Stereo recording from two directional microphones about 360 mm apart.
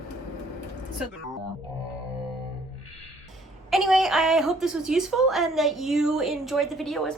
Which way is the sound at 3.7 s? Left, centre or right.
Centre.